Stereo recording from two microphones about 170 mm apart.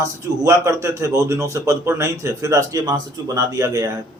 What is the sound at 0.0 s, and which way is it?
A man's voice, 20° right (ahead or behind).